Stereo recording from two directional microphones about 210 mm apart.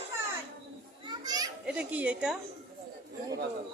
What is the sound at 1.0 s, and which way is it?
Children playing, 20° right (ahead or behind).